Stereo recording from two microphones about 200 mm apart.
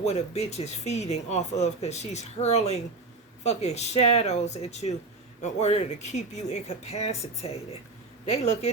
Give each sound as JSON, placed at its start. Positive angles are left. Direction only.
{"t": 0.0, "sound": "speech", "side_deg": 35}